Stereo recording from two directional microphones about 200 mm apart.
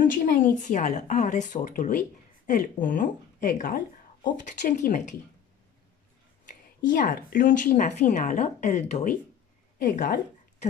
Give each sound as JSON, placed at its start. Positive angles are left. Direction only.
{"t": 0.3, "sound": "speech", "side_deg": 40}
{"t": 6.9, "sound": "speech", "side_deg": 45}